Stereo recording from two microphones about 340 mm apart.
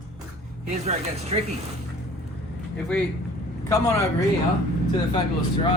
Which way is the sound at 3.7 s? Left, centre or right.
Centre.